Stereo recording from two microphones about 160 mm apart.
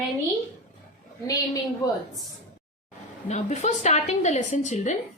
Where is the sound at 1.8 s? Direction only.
25° left (ahead or behind).